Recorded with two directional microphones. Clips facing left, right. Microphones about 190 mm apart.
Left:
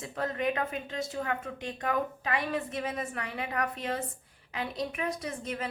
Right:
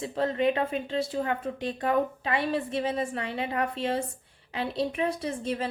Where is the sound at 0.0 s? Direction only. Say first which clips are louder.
Right 6 dB; 30° right (ahead or behind).